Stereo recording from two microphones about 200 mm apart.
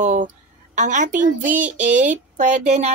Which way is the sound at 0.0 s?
40° right (ahead or behind).